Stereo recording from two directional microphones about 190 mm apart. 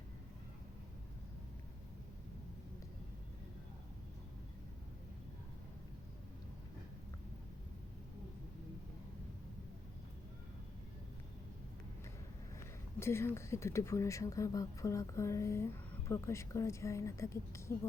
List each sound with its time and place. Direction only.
13.0 s speech: 15° left (ahead or behind)